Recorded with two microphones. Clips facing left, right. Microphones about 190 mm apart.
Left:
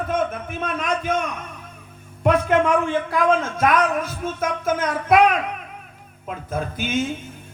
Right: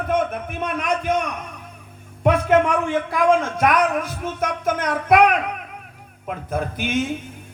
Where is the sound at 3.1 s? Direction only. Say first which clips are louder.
Right 3 dB; 10° right (ahead or behind).